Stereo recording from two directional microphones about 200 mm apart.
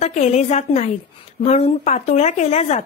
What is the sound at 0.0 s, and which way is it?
Speech, 35° left (ahead or behind).